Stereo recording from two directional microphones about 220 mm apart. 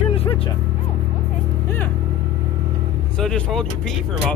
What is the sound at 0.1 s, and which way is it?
Music, 25° left (ahead or behind).